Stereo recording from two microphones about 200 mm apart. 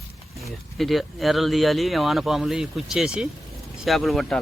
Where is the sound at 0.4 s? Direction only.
Centre (ahead or behind).